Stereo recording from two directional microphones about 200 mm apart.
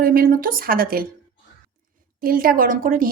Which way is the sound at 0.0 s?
45° right (ahead or behind).